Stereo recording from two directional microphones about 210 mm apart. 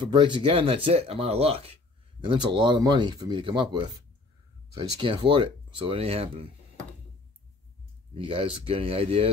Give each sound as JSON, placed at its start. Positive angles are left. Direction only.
{"t": 0.0, "sound": "speech", "side_deg": -20}
{"t": 8.1, "sound": "speech", "side_deg": -25}